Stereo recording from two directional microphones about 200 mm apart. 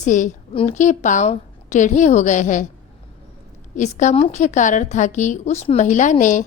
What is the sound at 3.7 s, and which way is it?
A woman's voice, 40° left (ahead or behind).